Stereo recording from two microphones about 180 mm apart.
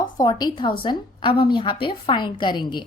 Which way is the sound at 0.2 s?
20° left (ahead or behind).